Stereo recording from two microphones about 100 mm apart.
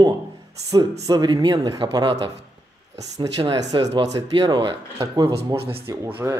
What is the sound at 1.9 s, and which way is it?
Speech, 55° right (ahead or behind).